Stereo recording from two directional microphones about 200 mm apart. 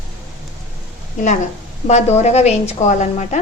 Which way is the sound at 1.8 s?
35° left (ahead or behind).